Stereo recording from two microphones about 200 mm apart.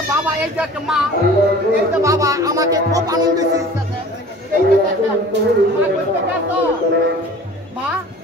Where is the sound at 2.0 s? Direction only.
15° right (ahead or behind).